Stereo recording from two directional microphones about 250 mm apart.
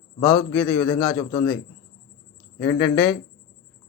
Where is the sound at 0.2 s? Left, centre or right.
Centre.